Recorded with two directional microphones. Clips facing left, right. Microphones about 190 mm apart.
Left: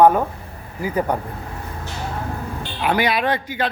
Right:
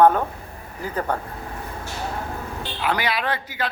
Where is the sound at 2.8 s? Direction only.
20° left (ahead or behind).